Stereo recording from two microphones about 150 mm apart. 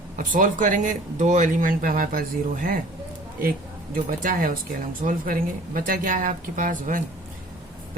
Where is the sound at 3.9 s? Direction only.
70° right (ahead or behind).